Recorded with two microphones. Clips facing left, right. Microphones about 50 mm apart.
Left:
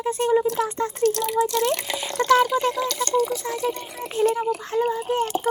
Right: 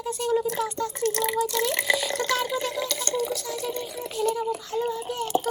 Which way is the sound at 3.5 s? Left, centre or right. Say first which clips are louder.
Left 4 dB; left.